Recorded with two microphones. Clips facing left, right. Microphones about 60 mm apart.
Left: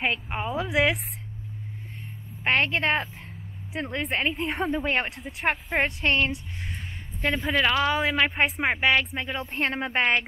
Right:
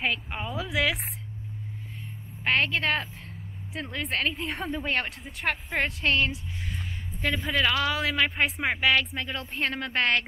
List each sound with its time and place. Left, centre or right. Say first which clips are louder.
0.1 s speech: left 3 dB; centre
2.5 s speech: left 2 dB; centre
5.5 s speech: left 3 dB; left
5.9 s a woman's voice: left 1 dB; centre